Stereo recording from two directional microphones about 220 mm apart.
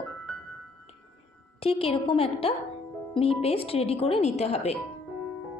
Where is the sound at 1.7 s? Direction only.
25° left (ahead or behind).